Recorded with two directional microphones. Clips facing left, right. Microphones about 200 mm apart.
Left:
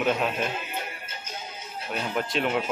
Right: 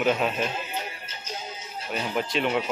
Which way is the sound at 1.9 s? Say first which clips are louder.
Right 1 dB; centre (ahead or behind).